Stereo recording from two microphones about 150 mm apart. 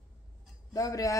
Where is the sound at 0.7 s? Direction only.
25° left (ahead or behind).